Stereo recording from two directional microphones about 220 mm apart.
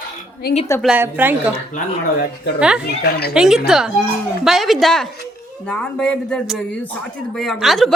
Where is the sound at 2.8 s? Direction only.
45° left (ahead or behind).